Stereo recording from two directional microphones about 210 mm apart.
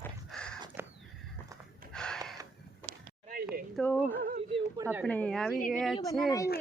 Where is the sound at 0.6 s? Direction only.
10° right (ahead or behind).